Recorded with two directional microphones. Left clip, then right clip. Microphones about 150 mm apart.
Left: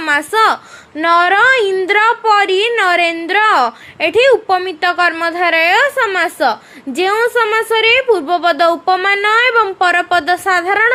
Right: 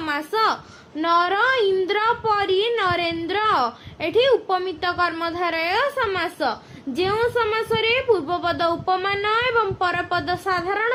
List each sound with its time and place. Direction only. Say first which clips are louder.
0.0 s a woman's voice: left 9 dB; 45° left (ahead or behind)